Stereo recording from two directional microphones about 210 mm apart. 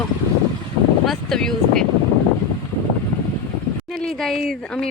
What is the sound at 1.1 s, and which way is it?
Speech, centre (ahead or behind).